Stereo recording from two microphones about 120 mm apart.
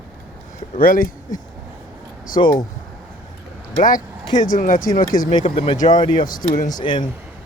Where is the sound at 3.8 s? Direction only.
90° left.